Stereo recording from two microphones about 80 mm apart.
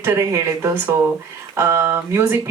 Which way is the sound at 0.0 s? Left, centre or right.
Right.